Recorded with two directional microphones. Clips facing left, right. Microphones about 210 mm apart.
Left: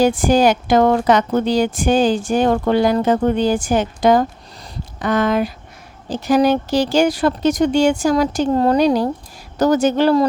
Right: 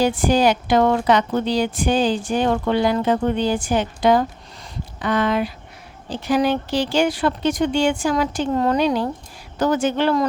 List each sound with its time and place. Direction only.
0.0 s speech: 45° left (ahead or behind)